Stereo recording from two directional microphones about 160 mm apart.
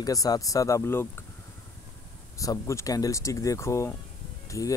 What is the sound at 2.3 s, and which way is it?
Speech, 20° left (ahead or behind).